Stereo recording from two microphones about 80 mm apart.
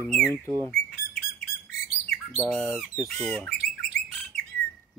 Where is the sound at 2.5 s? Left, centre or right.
Centre.